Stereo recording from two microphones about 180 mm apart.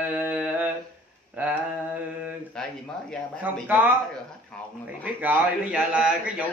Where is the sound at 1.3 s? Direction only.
10° right (ahead or behind).